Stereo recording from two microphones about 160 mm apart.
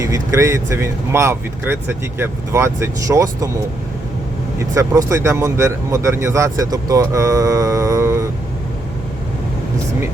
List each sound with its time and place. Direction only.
0.0 s speech: 20° right (ahead or behind)
4.7 s speech: 20° right (ahead or behind)